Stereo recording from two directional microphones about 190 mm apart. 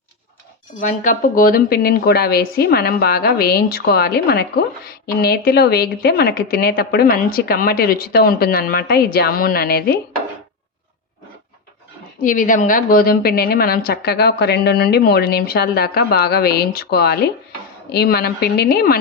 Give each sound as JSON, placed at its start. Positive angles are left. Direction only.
{"t": 0.8, "sound": "a woman's voice", "side_deg": 40}
{"t": 12.2, "sound": "a woman's voice", "side_deg": 45}